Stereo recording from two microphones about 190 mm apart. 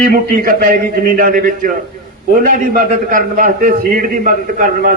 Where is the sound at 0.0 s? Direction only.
45° right (ahead or behind).